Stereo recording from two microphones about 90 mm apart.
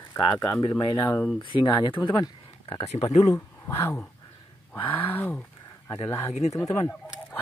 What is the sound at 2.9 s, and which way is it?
Speech, 40° left (ahead or behind).